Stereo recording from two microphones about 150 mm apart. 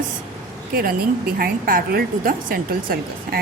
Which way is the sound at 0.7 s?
75° right (ahead or behind).